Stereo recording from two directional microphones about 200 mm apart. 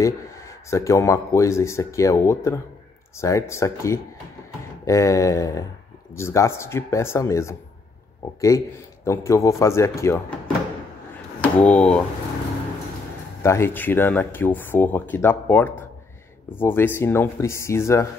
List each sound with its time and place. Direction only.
0.0 s speech: 15° left (ahead or behind)
11.4 s speech: 5° left (ahead or behind)
13.4 s speech: 15° left (ahead or behind)